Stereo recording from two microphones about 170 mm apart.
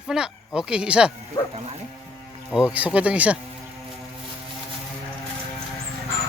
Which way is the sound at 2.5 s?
5° right (ahead or behind).